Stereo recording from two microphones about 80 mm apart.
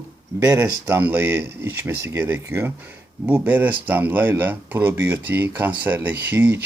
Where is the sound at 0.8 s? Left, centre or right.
Right.